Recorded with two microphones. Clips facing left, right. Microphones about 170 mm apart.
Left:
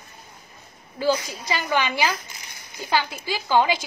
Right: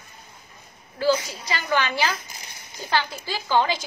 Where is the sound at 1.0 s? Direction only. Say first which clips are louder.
Right 1 dB; 15° left (ahead or behind).